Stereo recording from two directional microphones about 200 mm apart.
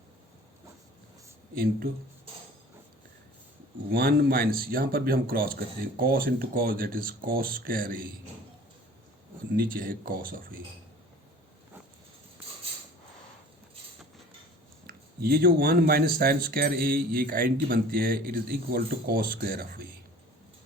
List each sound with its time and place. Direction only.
1.5 s speech: 45° right (ahead or behind)
3.9 s speech: 50° right (ahead or behind)
9.6 s speech: 45° right (ahead or behind)
14.8 s speech: 50° right (ahead or behind)